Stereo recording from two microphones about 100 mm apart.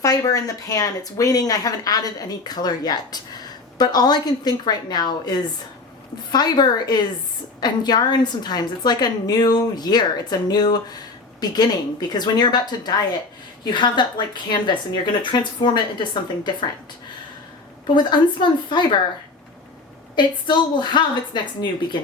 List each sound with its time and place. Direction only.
0.0 s a woman's voice: 35° left (ahead or behind)
17.9 s a woman's voice: 50° left (ahead or behind)
20.1 s a woman's voice: 50° left (ahead or behind)